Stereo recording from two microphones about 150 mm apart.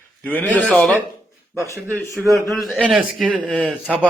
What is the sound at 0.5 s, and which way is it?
Speech, 10° left (ahead or behind).